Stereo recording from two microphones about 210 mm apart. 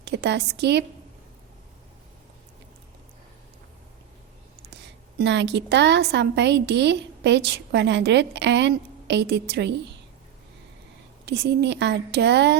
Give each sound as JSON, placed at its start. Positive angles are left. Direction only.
{"t": 0.0, "sound": "a woman's voice", "side_deg": -55}
{"t": 4.7, "sound": "a woman's voice", "side_deg": -55}
{"t": 11.3, "sound": "speech", "side_deg": -55}